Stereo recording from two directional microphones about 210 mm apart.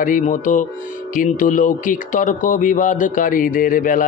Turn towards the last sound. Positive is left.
turn(degrees=40)  # may be behind; listen again after turning